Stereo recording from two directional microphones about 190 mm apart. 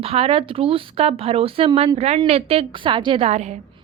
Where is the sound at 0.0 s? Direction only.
30° right (ahead or behind).